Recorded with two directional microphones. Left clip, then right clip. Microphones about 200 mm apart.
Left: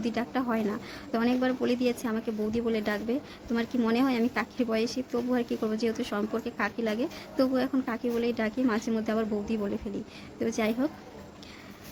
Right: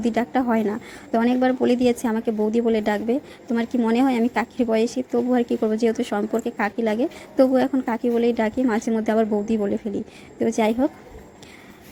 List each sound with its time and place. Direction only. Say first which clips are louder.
0.0 s a woman's voice: right 9 dB; 25° right (ahead or behind)